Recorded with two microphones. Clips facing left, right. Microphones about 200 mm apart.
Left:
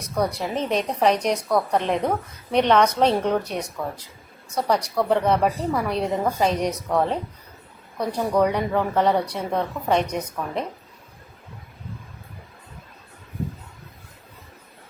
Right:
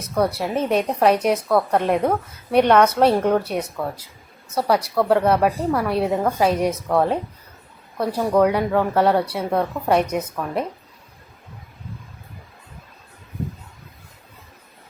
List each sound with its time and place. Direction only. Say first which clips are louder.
0.2 s a woman's voice: right 3 dB; 5° right (ahead or behind)